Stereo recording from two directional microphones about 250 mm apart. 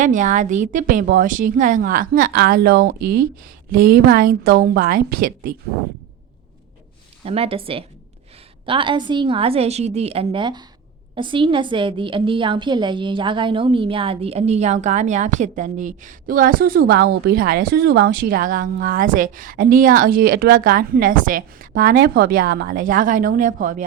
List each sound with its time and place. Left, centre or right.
0.0 s a woman's voice: right
3.0 s speech: right
3.7 s a woman's voice: right
7.3 s a woman's voice: right